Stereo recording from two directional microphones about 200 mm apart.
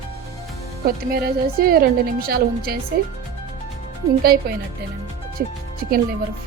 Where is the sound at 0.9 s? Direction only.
50° right (ahead or behind).